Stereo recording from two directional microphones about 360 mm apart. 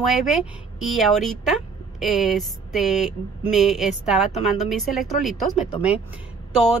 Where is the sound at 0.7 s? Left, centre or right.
Centre.